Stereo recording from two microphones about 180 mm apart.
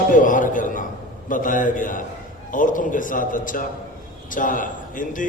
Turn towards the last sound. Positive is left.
turn(degrees=45)  # may be behind; listen again after turning